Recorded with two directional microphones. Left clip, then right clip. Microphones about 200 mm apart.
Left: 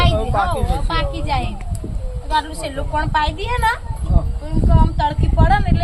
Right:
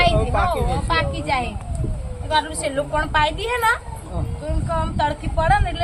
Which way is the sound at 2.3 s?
20° right (ahead or behind).